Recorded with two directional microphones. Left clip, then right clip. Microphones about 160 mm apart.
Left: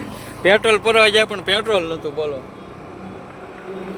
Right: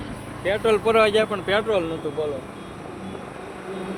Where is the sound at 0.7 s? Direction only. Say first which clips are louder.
Left 4 dB; 55° left (ahead or behind); by 2.3 s 70° left (ahead or behind).